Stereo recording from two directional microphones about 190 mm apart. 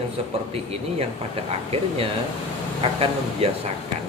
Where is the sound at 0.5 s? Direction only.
30° right (ahead or behind).